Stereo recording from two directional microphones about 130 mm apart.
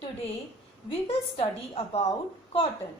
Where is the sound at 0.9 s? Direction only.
45° left (ahead or behind).